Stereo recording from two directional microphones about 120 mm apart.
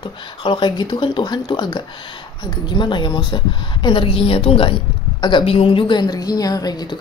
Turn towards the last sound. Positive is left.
turn(degrees=30)  # may be behind; listen again after turning